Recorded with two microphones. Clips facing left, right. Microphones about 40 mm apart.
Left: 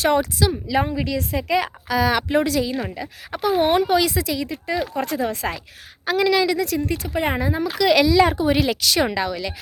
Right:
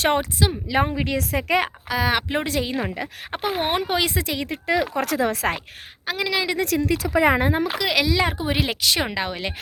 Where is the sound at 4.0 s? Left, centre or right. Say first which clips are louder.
Left 2 dB; right.